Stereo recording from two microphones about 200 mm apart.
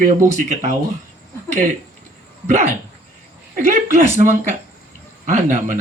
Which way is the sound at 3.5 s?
40° right (ahead or behind).